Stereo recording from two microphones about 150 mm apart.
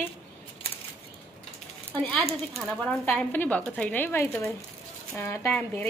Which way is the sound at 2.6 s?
5° left (ahead or behind).